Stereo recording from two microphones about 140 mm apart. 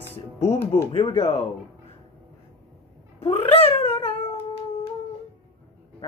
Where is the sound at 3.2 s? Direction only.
40° left (ahead or behind).